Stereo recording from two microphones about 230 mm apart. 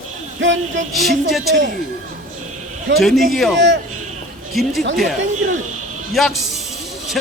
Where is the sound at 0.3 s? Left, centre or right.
Right.